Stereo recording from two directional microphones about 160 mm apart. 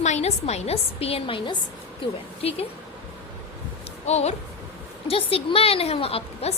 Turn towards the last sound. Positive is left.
turn(degrees=40)  # may be behind; listen again after turning